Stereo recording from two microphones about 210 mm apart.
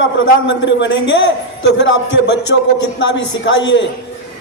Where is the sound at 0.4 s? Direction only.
55° left (ahead or behind).